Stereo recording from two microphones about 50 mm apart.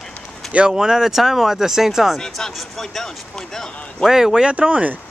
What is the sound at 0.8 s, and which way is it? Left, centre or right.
Speech, centre.